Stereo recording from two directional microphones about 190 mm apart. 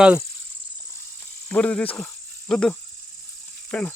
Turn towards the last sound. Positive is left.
turn(degrees=5)  # may be behind; listen again after turning